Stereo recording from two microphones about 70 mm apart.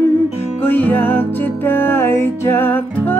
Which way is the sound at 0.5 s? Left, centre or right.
Left.